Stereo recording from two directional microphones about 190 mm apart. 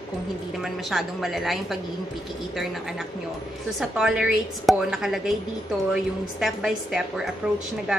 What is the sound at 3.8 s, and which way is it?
A woman's voice, 5° right (ahead or behind).